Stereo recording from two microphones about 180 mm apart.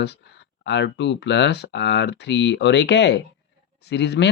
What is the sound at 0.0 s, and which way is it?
Speech, 70° left (ahead or behind).